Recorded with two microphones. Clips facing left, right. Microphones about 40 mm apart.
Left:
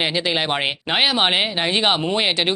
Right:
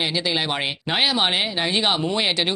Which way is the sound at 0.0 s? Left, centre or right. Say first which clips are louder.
Left 2 dB; left.